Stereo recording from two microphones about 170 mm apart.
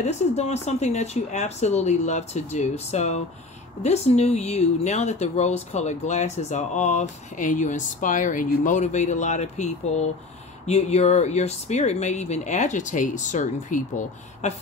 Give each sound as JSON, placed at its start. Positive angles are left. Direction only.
{"t": 0.0, "sound": "speech", "side_deg": 40}